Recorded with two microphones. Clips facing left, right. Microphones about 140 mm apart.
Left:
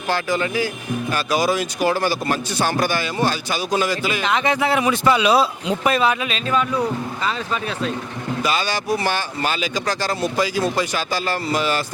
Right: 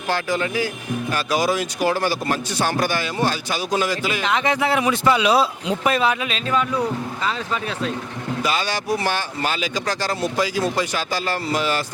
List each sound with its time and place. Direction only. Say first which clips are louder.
0.1 s speech: left 1 dB; 15° left (ahead or behind)